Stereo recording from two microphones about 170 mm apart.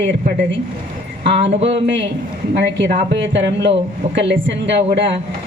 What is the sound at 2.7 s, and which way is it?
Speech, 90° right.